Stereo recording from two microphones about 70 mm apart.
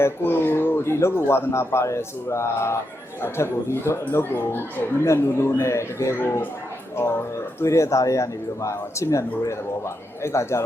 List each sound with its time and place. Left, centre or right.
0.0 s speech: left
7.6 s a man's voice: left